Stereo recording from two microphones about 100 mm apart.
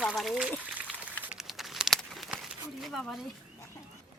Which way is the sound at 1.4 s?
Centre (ahead or behind).